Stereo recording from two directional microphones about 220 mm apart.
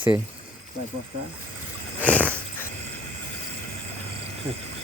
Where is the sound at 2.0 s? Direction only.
5° left (ahead or behind).